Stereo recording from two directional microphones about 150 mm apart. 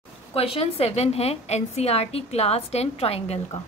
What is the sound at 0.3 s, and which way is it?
A woman's voice, 40° left (ahead or behind).